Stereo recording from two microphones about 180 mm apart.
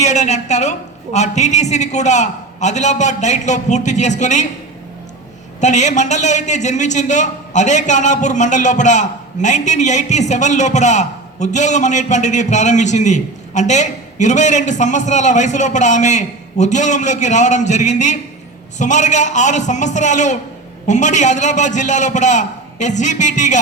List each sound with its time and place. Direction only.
0.0 s a man's voice: 40° left (ahead or behind)
5.5 s a man's voice: 40° left (ahead or behind)